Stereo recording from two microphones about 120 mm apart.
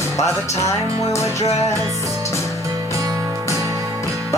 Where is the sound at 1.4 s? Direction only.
65° left (ahead or behind).